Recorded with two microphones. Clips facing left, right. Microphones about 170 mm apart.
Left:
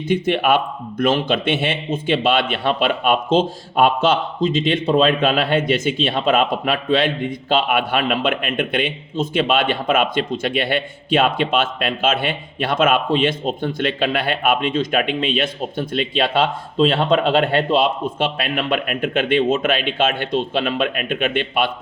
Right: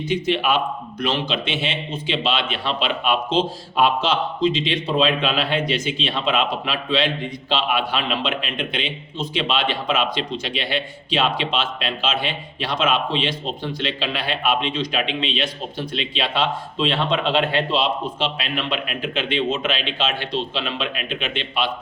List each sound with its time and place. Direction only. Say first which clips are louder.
0.1 s speech: left 4 dB; 55° left (ahead or behind)